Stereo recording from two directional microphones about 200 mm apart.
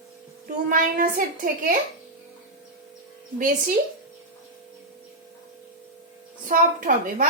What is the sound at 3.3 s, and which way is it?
Speech, 40° right (ahead or behind).